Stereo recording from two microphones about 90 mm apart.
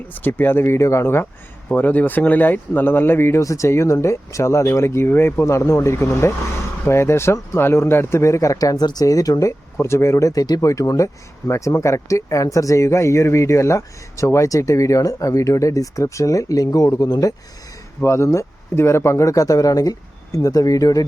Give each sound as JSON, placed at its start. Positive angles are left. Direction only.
{"t": 0.1, "sound": "speech", "side_deg": 20}
{"t": 18.0, "sound": "speech", "side_deg": 30}